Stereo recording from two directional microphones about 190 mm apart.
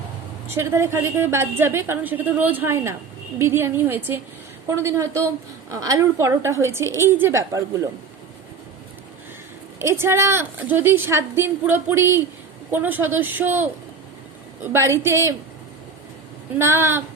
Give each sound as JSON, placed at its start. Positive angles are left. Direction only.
{"t": 0.5, "sound": "a woman's voice", "side_deg": -15}
{"t": 9.8, "sound": "a woman's voice", "side_deg": -15}
{"t": 14.7, "sound": "a woman's voice", "side_deg": -15}
{"t": 16.6, "sound": "a woman's voice", "side_deg": -15}